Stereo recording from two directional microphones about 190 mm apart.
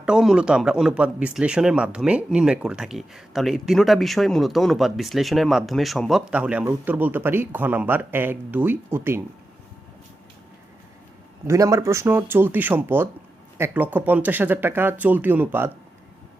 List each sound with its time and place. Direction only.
0.0 s speech: 5° right (ahead or behind)
11.4 s speech: 15° right (ahead or behind)